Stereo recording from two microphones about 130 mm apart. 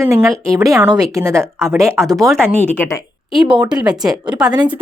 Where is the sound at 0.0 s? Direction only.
20° right (ahead or behind).